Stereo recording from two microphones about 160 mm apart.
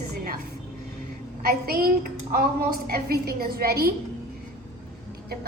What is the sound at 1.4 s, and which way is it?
A woman's voice, 70° right (ahead or behind).